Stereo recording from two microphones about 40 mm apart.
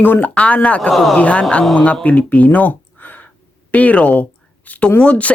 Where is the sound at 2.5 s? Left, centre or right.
Left.